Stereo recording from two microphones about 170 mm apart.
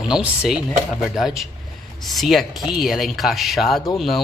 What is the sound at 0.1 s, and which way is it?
Speech, 5° right (ahead or behind).